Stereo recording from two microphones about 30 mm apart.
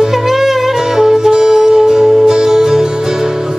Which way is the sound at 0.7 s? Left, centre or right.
Centre.